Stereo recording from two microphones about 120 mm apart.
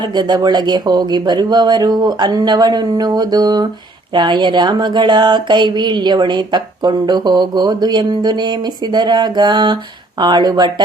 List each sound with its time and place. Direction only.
0.0 s speech: 35° right (ahead or behind)